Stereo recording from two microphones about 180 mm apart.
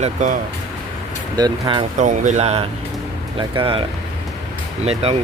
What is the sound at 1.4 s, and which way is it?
Speech, 25° right (ahead or behind).